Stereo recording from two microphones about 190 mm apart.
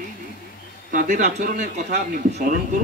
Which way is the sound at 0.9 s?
45° right (ahead or behind).